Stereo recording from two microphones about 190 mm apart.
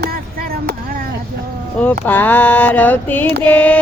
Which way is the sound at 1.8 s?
10° left (ahead or behind).